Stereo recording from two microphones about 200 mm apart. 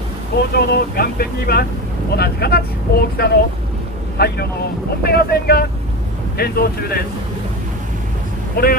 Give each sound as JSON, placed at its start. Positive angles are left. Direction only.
{"t": 0.4, "sound": "speech", "side_deg": 50}